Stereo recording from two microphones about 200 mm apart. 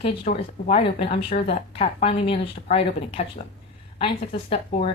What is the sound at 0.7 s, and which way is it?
Speech, 30° left (ahead or behind).